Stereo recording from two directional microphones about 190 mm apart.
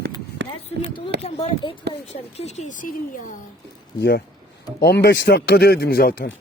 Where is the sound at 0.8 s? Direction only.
25° left (ahead or behind); by 3.3 s 45° left (ahead or behind).